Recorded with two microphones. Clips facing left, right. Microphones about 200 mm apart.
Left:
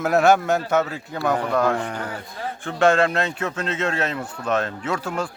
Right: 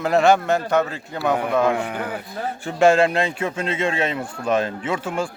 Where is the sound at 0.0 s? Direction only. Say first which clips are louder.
Even; 5° left (ahead or behind).